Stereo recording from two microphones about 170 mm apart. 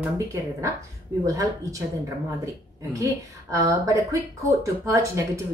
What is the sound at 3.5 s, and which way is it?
A woman's voice, 20° right (ahead or behind).